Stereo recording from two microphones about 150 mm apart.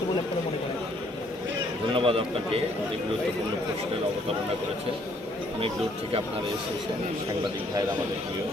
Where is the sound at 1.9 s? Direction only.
35° right (ahead or behind).